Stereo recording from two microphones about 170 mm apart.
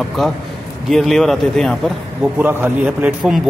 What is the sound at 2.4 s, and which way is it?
A man's voice, 10° right (ahead or behind).